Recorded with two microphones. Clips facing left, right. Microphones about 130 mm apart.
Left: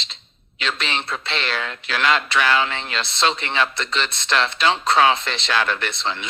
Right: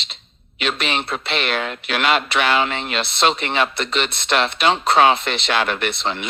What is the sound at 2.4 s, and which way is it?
Speech, 15° right (ahead or behind).